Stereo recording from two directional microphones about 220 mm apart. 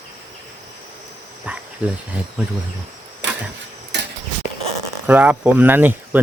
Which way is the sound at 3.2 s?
55° right (ahead or behind).